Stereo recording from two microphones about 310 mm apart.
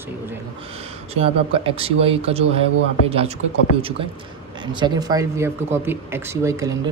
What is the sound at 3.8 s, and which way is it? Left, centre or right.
Speech, centre.